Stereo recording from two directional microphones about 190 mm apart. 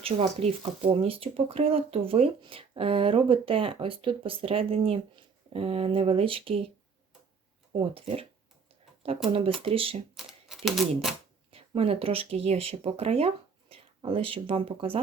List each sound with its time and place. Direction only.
0.0 s speech: 30° right (ahead or behind)
7.7 s speech: 30° right (ahead or behind)
10.2 s typewriter: centre (ahead or behind)
11.5 s speech: 30° right (ahead or behind)